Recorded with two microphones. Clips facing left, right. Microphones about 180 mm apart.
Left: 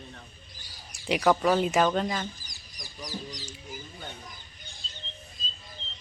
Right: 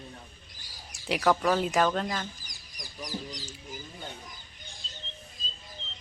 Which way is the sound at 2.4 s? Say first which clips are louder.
Even; 50° right (ahead or behind).